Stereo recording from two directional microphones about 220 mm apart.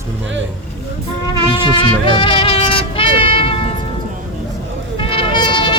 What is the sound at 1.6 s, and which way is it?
Music, 20° left (ahead or behind).